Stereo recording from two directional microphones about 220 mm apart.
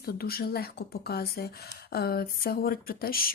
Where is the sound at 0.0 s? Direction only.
45° left (ahead or behind).